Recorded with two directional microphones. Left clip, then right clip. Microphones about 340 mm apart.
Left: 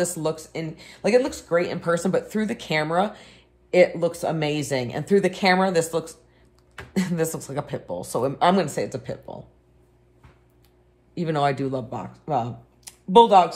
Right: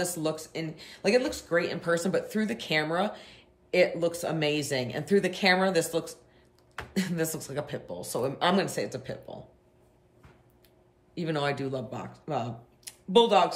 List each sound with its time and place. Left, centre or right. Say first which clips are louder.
0.0 s speech: left 5 dB; centre
11.1 s speech: left 7 dB; centre